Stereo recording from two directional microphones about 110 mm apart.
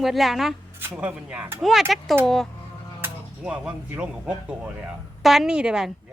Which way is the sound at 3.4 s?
10° right (ahead or behind).